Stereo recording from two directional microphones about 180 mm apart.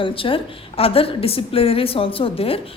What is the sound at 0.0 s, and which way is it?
A woman's voice, 30° left (ahead or behind).